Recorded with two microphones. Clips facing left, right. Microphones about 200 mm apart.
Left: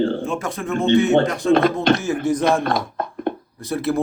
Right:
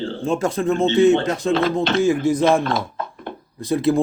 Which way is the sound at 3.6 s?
15° right (ahead or behind).